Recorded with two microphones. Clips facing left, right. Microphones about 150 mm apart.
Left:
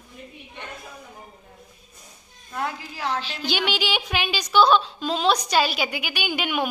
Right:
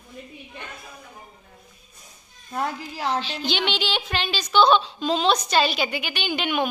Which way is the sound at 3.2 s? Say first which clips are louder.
Right 1 dB; 10° left (ahead or behind).